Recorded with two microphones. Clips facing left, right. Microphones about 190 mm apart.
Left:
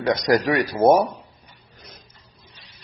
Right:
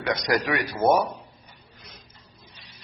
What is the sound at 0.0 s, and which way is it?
Speech, 35° left (ahead or behind).